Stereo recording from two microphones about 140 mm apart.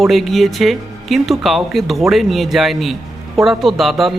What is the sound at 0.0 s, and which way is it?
Speech, centre (ahead or behind).